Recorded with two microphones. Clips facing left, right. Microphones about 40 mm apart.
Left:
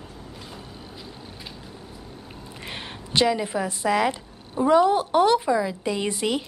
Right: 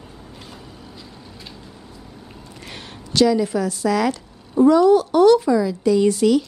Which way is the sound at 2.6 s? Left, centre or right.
Left.